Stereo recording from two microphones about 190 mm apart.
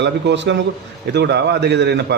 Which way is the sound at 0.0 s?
65° right (ahead or behind).